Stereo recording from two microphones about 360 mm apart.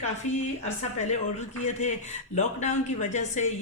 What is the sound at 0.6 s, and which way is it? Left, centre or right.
Speech, centre.